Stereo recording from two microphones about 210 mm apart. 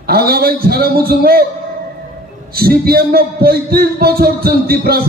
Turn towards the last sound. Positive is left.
turn(degrees=-45)  # may be behind; listen again after turning